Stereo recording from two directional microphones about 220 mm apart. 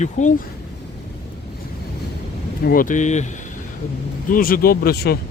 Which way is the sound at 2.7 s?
40° left (ahead or behind).